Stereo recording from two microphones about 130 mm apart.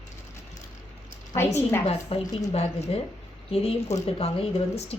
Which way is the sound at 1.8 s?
55° left (ahead or behind).